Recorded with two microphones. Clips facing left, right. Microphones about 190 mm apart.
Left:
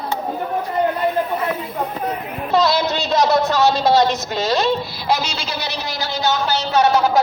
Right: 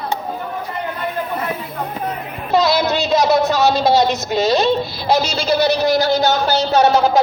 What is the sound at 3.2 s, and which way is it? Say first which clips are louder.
A man's voice: left 1 dB; 10° right (ahead or behind).